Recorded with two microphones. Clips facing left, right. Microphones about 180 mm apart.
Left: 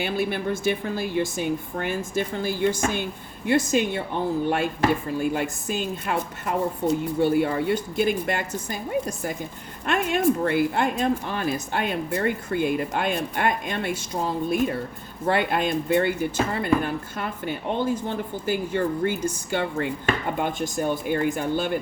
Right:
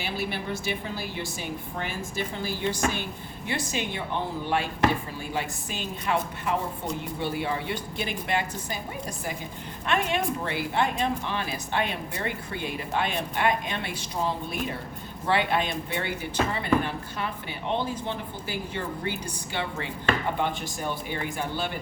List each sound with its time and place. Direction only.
0.0 s speech: 50° left (ahead or behind)
15.3 s speech: 45° left (ahead or behind)